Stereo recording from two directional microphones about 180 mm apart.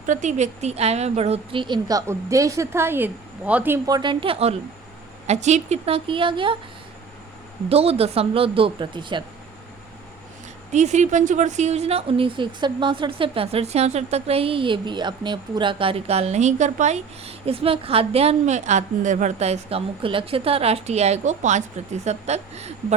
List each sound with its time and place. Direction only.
0.0 s speech: 45° right (ahead or behind); by 3.8 s 10° right (ahead or behind)
3.8 s a woman's voice: 25° right (ahead or behind)
7.7 s a woman's voice: 35° right (ahead or behind)
10.7 s a woman's voice: 40° right (ahead or behind)